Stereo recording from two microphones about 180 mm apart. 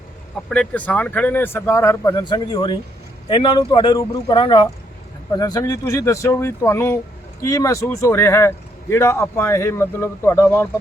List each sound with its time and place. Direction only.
0.5 s speech: 5° left (ahead or behind)